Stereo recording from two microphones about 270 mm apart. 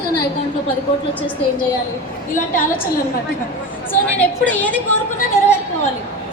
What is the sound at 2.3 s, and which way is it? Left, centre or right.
Speech, left.